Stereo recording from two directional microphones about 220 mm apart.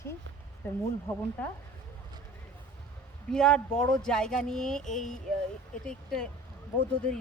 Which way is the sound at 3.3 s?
5° left (ahead or behind).